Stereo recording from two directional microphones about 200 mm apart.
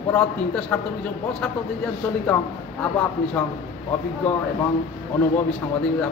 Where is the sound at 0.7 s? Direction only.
5° left (ahead or behind).